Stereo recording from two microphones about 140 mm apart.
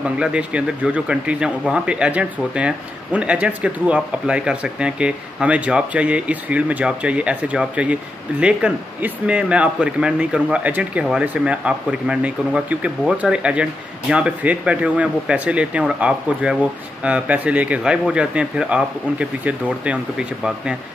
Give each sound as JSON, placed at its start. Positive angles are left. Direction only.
{"t": 0.2, "sound": "speech", "side_deg": -10}